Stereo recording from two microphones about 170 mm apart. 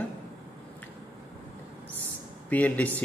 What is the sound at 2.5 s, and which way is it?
Speech, 10° left (ahead or behind).